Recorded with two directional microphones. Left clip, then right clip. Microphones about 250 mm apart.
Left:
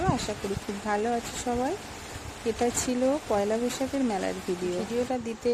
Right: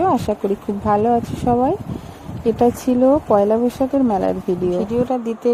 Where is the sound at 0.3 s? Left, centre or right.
Centre.